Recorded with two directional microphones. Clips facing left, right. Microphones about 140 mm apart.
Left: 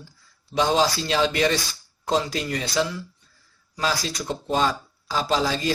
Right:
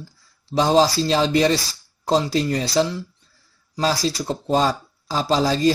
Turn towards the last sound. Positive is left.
turn(degrees=-35)  # may be behind; listen again after turning